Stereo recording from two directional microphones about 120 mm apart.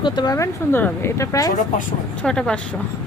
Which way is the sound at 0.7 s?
20° left (ahead or behind).